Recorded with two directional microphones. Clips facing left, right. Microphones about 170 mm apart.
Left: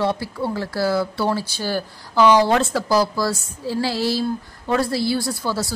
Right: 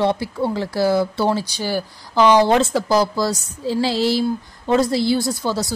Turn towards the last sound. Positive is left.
turn(degrees=-20)  # may be behind; listen again after turning